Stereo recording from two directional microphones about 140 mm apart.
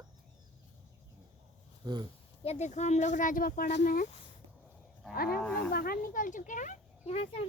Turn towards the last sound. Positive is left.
turn(degrees=45)  # may be behind; listen again after turning